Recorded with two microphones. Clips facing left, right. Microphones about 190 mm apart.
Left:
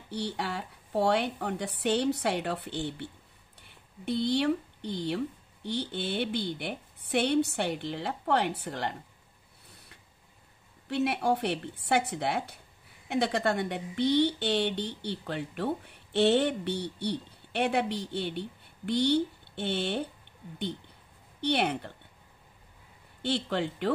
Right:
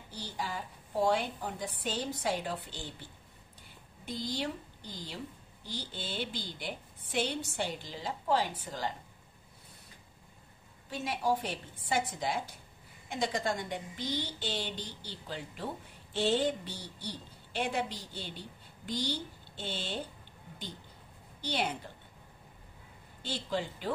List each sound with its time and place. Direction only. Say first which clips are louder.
0.1 s a woman's voice: left 6 dB; 65° left (ahead or behind)
10.9 s a woman's voice: left 5 dB; 65° left (ahead or behind)
21.4 s a woman's voice: left 6 dB; 65° left (ahead or behind)
23.2 s a woman's voice: left 6 dB; 65° left (ahead or behind)